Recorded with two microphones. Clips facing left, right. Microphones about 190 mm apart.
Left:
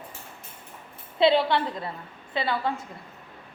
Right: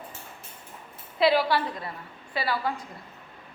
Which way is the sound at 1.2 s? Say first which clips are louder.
Left 2 dB; 25° left (ahead or behind).